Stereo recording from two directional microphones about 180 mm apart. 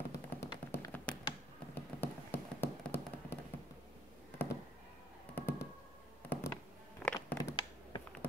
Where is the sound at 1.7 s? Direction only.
10° left (ahead or behind).